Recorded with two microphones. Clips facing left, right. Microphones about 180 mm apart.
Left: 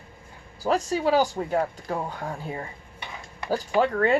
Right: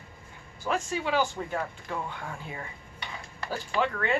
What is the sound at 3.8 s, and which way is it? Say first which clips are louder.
Speech: left 6 dB; 40° left (ahead or behind).